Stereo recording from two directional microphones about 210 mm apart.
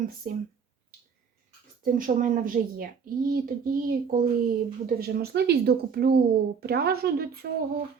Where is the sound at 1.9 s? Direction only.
40° right (ahead or behind).